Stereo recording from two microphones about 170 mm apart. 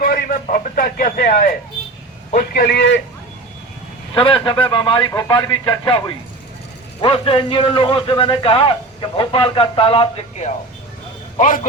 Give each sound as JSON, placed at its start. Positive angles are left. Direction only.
{"t": 0.0, "sound": "radio", "side_deg": 60}
{"t": 0.4, "sound": "a man's voice", "side_deg": 55}
{"t": 4.1, "sound": "a man's voice", "side_deg": 25}
{"t": 7.0, "sound": "a man's voice", "side_deg": 30}
{"t": 11.3, "sound": "a man's voice", "side_deg": 50}